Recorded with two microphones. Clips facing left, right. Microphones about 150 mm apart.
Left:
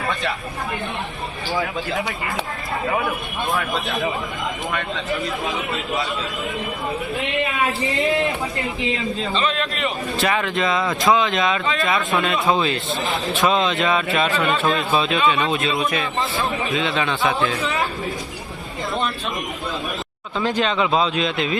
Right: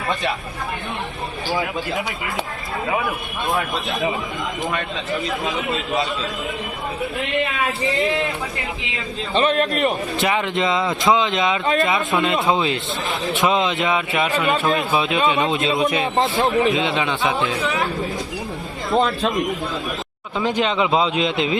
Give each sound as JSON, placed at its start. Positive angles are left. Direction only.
{"t": 7.9, "sound": "a man's voice", "side_deg": 0}
{"t": 9.3, "sound": "a man's voice", "side_deg": -50}
{"t": 10.2, "sound": "speech", "side_deg": -20}
{"t": 17.7, "sound": "a man's voice", "side_deg": 0}
{"t": 20.4, "sound": "speech", "side_deg": -20}